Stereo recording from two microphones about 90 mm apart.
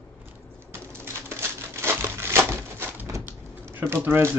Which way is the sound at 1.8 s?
30° right (ahead or behind).